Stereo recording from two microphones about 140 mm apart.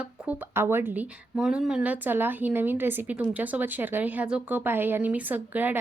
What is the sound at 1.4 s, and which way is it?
A woman's voice, 5° right (ahead or behind).